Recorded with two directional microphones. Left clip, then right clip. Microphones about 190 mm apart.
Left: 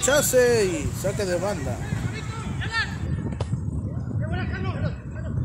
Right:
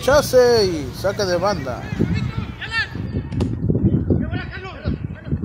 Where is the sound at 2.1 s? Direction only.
10° left (ahead or behind).